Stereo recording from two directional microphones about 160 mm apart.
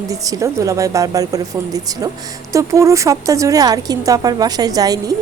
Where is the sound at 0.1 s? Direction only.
20° right (ahead or behind).